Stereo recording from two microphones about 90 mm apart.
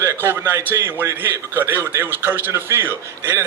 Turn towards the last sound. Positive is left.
turn(degrees=-30)  # may be behind; listen again after turning